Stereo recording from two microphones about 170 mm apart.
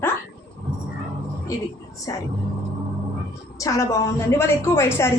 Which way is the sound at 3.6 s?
20° left (ahead or behind).